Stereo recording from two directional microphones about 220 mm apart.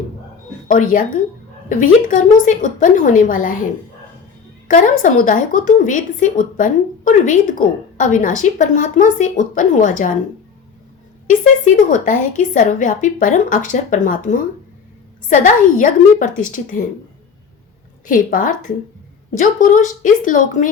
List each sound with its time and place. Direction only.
0.7 s speech: 35° left (ahead or behind)
4.7 s speech: 35° left (ahead or behind)
11.3 s speech: 35° left (ahead or behind)
18.0 s speech: 35° left (ahead or behind)